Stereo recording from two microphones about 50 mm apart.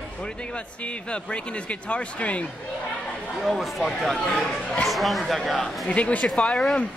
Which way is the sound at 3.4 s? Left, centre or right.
Centre.